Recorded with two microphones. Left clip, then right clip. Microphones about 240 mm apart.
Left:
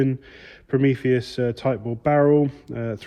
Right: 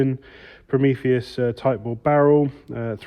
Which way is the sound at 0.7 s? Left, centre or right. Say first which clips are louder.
Right 1 dB; right.